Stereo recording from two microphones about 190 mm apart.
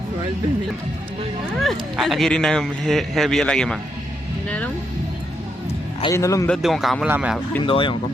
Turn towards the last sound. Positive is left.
turn(degrees=25)  # may be behind; listen again after turning